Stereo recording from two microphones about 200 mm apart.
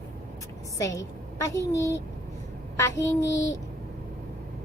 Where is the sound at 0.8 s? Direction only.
15° left (ahead or behind).